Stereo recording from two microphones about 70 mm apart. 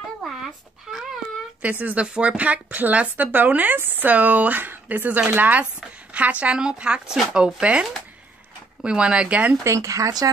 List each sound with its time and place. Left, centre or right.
0.2 s a sound: centre
1.6 s speech: right
9.6 s speech: right